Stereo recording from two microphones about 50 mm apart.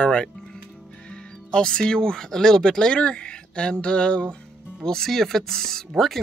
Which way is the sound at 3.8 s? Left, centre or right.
Left.